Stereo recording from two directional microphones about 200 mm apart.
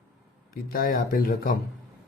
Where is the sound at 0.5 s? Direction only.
45° left (ahead or behind).